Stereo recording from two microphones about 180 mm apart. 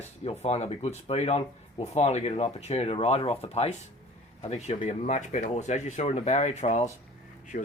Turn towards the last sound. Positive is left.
turn(degrees=50)  # may be behind; listen again after turning